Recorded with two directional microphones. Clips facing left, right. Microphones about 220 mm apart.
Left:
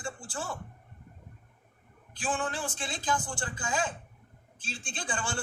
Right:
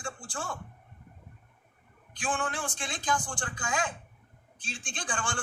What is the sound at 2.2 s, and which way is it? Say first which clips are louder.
A man's voice: even; 5° left (ahead or behind).